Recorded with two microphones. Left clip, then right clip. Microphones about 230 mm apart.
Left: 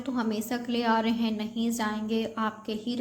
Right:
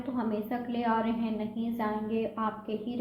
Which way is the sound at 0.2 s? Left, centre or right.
Left.